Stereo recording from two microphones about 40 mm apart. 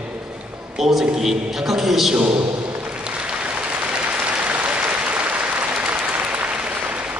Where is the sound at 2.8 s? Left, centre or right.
Right.